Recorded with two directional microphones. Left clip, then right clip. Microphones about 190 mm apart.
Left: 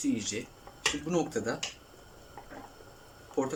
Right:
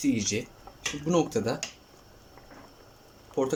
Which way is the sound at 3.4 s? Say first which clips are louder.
Right 3 dB; 15° right (ahead or behind).